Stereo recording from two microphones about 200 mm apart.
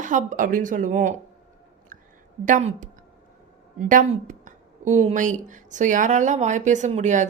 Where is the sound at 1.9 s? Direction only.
40° right (ahead or behind).